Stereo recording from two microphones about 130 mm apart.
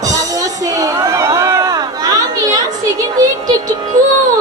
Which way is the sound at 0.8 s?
25° right (ahead or behind).